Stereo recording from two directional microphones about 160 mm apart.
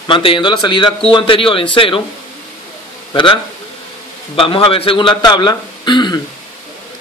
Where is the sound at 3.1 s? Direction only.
30° left (ahead or behind).